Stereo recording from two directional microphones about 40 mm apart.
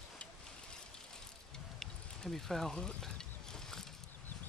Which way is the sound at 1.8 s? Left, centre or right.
Centre.